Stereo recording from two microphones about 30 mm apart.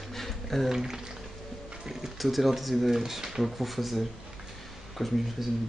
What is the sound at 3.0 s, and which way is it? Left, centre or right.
Speech, centre.